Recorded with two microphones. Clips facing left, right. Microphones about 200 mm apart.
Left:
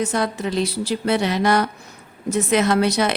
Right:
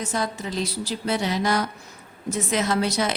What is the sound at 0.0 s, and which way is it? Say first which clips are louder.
A woman's voice: left 6 dB; 65° left (ahead or behind).